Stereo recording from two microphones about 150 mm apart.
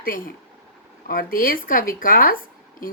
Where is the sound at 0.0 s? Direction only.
70° left (ahead or behind).